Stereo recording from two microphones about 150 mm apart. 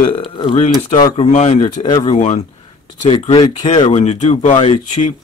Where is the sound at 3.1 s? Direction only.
40° left (ahead or behind).